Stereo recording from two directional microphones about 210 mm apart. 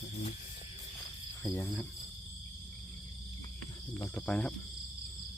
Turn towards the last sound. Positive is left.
turn(degrees=5)  # may be behind; listen again after turning